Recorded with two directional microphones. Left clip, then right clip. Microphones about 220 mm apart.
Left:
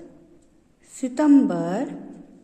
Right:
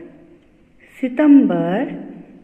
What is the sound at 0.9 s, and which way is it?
Speech, 15° left (ahead or behind).